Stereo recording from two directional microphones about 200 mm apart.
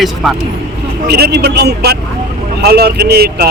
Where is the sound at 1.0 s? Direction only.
55° right (ahead or behind).